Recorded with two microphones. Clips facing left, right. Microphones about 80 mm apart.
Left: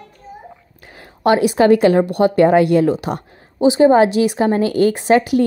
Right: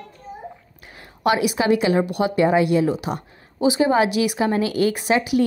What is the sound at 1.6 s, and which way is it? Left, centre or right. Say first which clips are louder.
A woman's voice: left 9 dB; left.